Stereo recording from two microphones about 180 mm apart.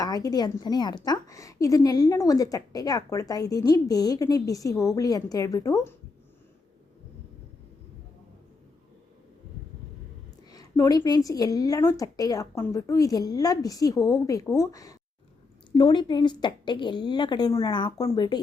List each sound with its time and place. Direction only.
0.0 s a woman's voice: 20° left (ahead or behind)
10.5 s a woman's voice: 20° left (ahead or behind)